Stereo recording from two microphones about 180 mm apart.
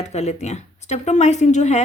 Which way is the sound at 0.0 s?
40° left (ahead or behind).